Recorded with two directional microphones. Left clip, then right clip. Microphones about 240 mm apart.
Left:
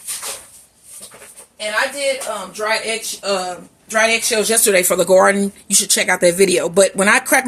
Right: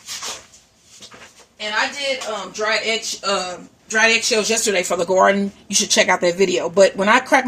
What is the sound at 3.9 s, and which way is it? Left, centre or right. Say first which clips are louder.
Speech: even; left.